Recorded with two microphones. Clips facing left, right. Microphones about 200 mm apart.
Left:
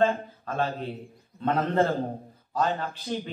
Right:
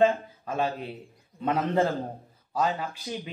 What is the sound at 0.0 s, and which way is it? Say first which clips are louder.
A man's voice: right 2 dB; 15° right (ahead or behind).